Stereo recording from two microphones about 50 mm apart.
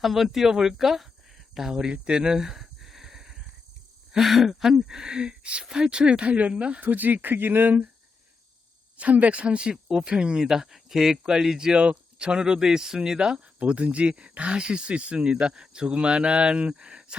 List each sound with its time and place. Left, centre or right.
0.0 s speech: centre
1.9 s a sound: centre
4.1 s speech: centre; by 7.9 s right
9.0 s speech: right; by 13.4 s centre
13.6 s speech: right